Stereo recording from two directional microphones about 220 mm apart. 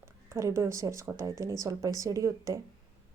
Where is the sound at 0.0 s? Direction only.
10° right (ahead or behind).